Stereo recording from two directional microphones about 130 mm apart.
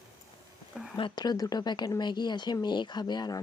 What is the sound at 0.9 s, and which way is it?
Speech, 35° left (ahead or behind).